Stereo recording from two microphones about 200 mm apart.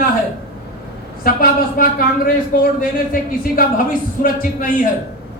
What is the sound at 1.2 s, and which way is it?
Speech, 45° left (ahead or behind).